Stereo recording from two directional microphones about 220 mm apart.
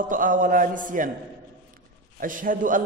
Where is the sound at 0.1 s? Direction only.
35° right (ahead or behind).